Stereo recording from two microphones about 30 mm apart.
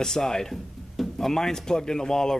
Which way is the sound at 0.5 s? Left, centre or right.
Centre.